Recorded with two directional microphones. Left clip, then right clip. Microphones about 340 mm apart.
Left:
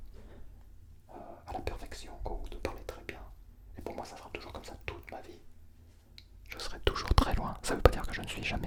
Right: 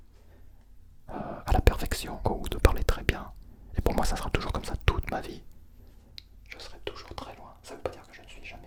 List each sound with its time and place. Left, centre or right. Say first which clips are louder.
1.0 s whispering: right 11 dB; right
6.6 s whispering: left 7 dB; centre
6.8 s whispering: left 9 dB; left